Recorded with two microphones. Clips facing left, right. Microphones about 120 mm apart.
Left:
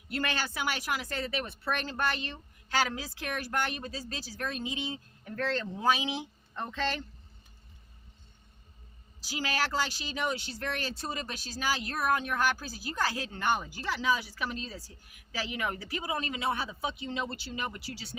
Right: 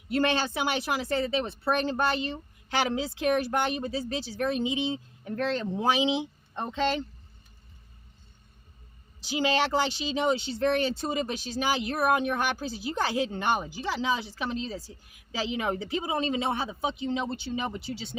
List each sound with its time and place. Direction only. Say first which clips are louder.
0.1 s speech: right 7 dB; 25° right (ahead or behind)
9.2 s speech: right 7 dB; 25° right (ahead or behind)